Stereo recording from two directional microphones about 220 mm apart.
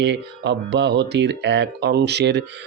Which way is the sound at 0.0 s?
50° right (ahead or behind).